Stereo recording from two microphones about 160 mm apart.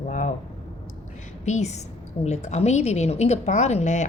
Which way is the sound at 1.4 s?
45° left (ahead or behind).